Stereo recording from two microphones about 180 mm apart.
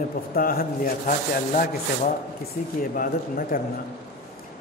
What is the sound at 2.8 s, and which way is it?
Speech, 50° left (ahead or behind).